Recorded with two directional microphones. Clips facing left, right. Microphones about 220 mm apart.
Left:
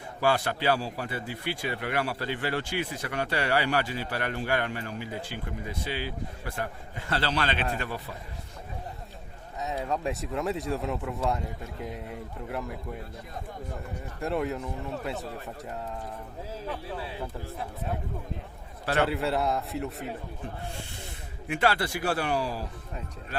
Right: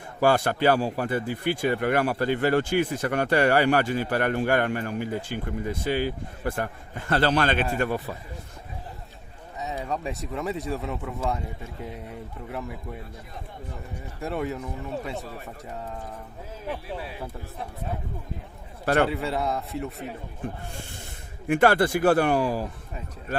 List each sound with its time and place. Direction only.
0.2 s a man's voice: 45° right (ahead or behind)
9.6 s speech: centre (ahead or behind)
14.2 s speech: centre (ahead or behind)
19.0 s speech: centre (ahead or behind)
21.4 s a man's voice: 50° right (ahead or behind)